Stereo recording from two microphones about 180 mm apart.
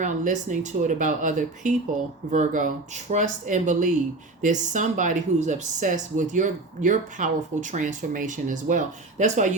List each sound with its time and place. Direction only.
0.0 s speech: 45° right (ahead or behind)